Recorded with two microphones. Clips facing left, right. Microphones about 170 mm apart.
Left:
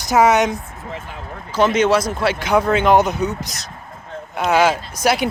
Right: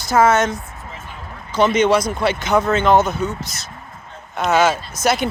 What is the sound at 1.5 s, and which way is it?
Speech, 10° left (ahead or behind).